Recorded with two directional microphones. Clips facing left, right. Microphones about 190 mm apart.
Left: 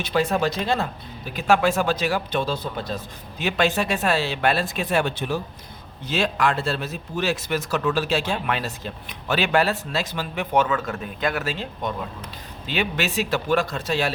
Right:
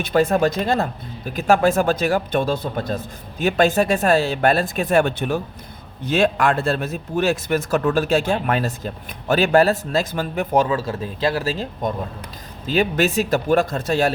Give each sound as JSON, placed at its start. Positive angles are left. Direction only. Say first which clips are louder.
{"t": 0.0, "sound": "speech", "louder": "right 5 dB", "side_deg": -50}